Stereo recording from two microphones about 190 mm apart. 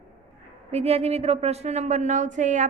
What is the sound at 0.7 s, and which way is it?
Speech, 35° right (ahead or behind).